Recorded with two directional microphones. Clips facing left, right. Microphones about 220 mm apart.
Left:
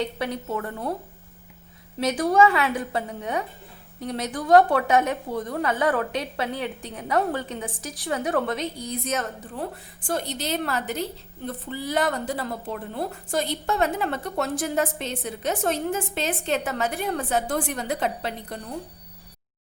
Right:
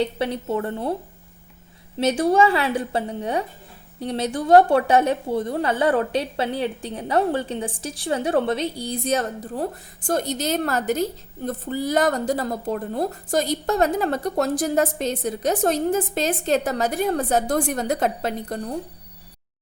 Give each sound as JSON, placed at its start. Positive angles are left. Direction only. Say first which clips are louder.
{"t": 0.0, "sound": "a woman's voice", "louder": "right 4 dB", "side_deg": -30}
{"t": 2.0, "sound": "a woman's voice", "louder": "right 2 dB", "side_deg": -30}